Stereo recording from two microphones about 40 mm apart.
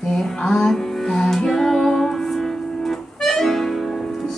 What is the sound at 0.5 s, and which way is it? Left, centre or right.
Music, centre.